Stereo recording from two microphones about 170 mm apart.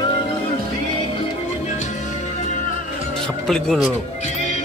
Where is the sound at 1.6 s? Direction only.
45° left (ahead or behind).